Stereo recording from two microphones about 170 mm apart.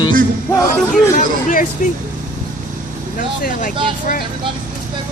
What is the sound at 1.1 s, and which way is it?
Speech, 50° left (ahead or behind).